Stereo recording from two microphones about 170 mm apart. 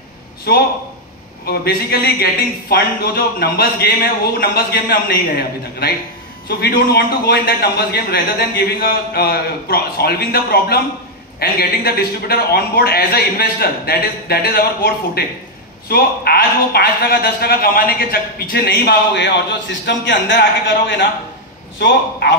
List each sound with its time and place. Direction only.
0.5 s a man's voice: 65° left (ahead or behind); by 22.3 s 90° left